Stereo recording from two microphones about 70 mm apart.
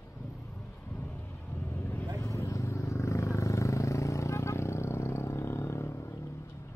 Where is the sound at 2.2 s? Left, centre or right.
Left.